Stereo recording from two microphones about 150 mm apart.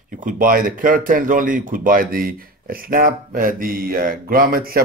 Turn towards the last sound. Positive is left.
turn(degrees=-80)